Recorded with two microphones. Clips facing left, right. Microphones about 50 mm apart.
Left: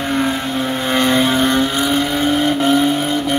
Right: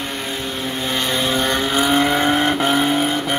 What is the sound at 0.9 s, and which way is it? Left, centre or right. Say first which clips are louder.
Vehicle: left 6 dB; left.